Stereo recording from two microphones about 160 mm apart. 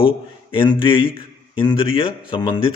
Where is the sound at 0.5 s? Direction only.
35° left (ahead or behind).